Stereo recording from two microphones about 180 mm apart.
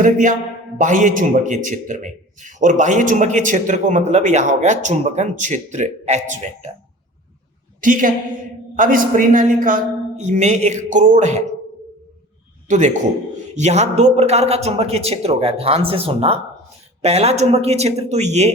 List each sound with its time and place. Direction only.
0.0 s a man's voice: 45° right (ahead or behind)
7.8 s a woman's voice: 45° right (ahead or behind)
12.6 s a man's voice: 40° right (ahead or behind)